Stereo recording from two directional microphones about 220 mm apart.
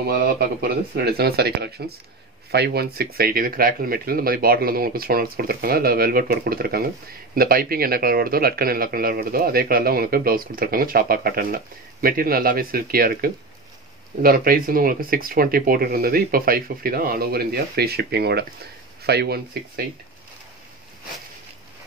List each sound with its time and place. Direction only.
0.0 s a man's voice: 40° right (ahead or behind)